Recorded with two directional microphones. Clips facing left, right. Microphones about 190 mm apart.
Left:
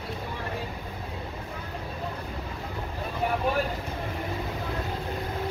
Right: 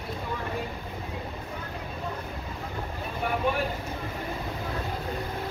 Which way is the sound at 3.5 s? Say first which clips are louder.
Left 2 dB; 40° left (ahead or behind).